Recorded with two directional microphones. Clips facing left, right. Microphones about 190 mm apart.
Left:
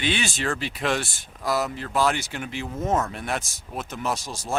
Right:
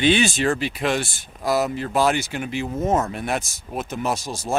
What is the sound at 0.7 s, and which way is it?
Speech, 5° right (ahead or behind).